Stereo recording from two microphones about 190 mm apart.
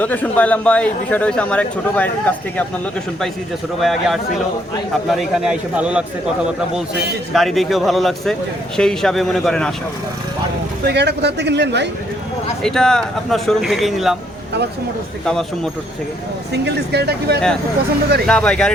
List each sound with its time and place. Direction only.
0.0 s speech: 10° left (ahead or behind)
3.8 s speech: centre (ahead or behind)
7.3 s speech: centre (ahead or behind)
10.8 s speech: 60° right (ahead or behind)
12.6 s speech: 5° left (ahead or behind)
15.2 s speech: 5° left (ahead or behind)
16.5 s speech: 60° right (ahead or behind)
18.3 s speech: 5° left (ahead or behind)